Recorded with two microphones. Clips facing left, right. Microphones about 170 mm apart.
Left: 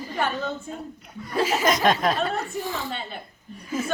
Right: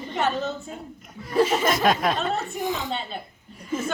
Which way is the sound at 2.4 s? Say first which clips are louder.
Right 2 dB; 20° right (ahead or behind).